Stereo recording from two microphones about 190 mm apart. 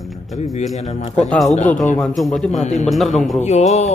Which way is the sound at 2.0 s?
Centre (ahead or behind).